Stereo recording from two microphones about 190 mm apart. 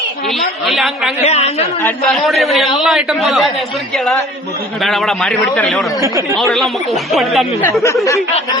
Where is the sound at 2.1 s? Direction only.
Centre (ahead or behind).